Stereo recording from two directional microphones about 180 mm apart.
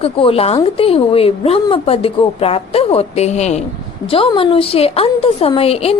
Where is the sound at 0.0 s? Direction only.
30° left (ahead or behind).